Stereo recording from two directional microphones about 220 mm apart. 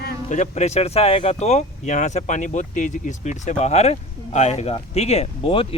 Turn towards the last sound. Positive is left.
turn(degrees=25)  # may be behind; listen again after turning